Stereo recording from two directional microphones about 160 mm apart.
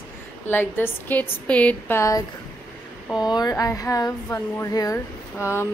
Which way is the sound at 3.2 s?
25° left (ahead or behind).